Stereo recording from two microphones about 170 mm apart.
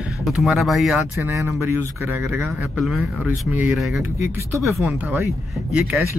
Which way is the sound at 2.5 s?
Centre (ahead or behind).